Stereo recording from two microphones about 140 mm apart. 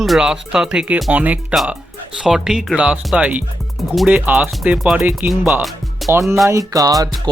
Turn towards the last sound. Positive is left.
turn(degrees=-25)  # may be behind; listen again after turning